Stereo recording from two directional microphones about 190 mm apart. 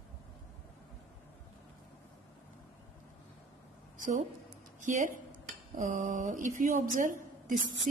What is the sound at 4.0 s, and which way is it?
A woman's voice, 40° right (ahead or behind).